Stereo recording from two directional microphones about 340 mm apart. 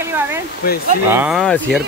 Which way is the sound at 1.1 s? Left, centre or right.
Centre.